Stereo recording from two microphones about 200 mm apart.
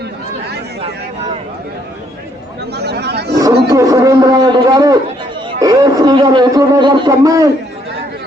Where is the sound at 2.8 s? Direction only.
55° right (ahead or behind).